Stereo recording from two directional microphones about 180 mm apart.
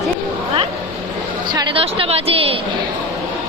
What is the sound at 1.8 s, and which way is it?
Speech, 30° right (ahead or behind).